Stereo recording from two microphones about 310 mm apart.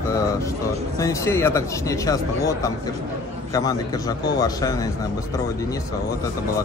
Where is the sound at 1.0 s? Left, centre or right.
Centre.